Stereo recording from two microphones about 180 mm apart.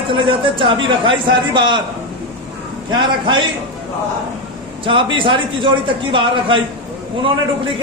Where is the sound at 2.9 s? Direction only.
25° right (ahead or behind).